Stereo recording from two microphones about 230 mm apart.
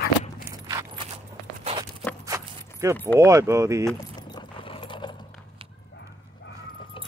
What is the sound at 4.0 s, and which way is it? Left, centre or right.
Keys jangling, centre.